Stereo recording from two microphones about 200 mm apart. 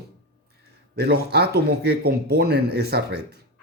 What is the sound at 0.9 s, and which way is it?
Speech, 55° right (ahead or behind).